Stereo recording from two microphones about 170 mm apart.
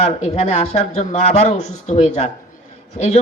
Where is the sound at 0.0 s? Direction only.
40° left (ahead or behind).